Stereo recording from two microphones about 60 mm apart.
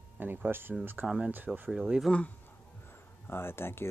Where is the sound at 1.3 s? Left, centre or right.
Right.